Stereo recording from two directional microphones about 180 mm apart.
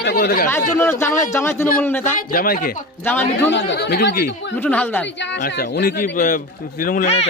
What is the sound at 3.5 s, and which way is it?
Speech, 70° left (ahead or behind).